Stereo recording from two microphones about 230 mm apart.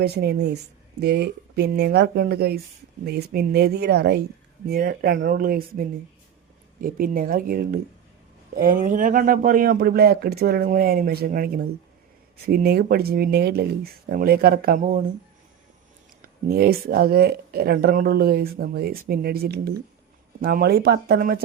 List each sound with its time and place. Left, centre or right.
0.0 s speech: right
6.8 s speech: right
16.2 s speech: right